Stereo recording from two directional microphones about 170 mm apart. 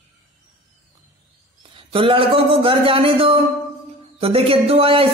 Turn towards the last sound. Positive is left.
turn(degrees=-35)  # may be behind; listen again after turning